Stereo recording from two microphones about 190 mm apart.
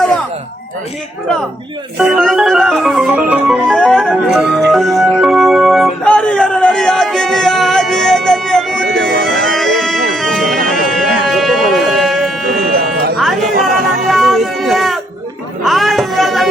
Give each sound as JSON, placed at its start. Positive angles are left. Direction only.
{"t": 2.0, "sound": "organ", "side_deg": 0}
{"t": 3.7, "sound": "music", "side_deg": 5}
{"t": 12.5, "sound": "music", "side_deg": -50}
{"t": 14.1, "sound": "music", "side_deg": 0}